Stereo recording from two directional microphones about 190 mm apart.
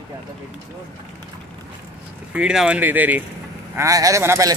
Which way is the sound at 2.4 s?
5° right (ahead or behind).